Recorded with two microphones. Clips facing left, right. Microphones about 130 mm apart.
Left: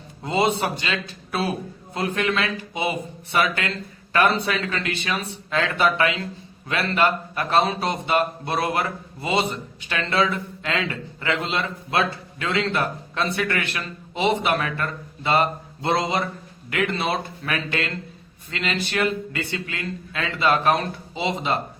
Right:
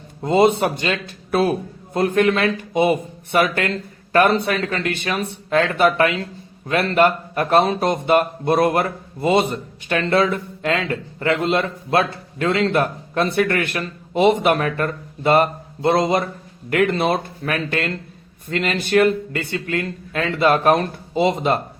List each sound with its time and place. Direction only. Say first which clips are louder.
0.2 s speech: right 6 dB; 45° right (ahead or behind)